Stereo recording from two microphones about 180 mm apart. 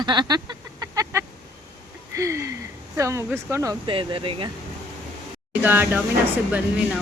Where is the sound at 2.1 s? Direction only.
15° right (ahead or behind).